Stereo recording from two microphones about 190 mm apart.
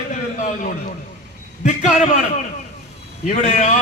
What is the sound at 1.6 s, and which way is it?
Chant, 40° left (ahead or behind).